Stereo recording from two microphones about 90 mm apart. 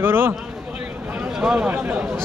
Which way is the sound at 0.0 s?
25° right (ahead or behind).